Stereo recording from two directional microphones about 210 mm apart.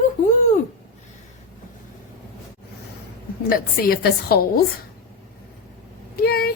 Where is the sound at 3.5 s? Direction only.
45° left (ahead or behind).